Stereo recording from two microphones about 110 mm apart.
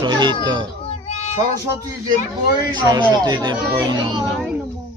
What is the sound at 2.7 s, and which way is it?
Speech, 40° right (ahead or behind).